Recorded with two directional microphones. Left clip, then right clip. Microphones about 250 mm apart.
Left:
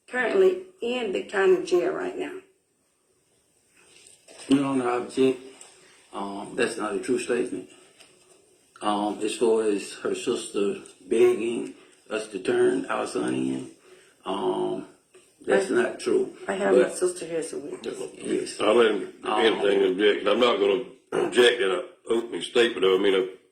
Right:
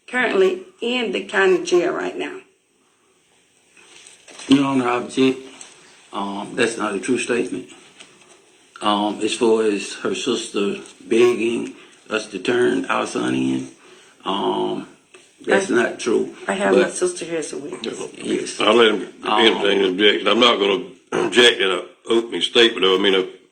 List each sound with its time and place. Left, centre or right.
0.1 s speech: right
4.4 s speech: right
8.8 s speech: right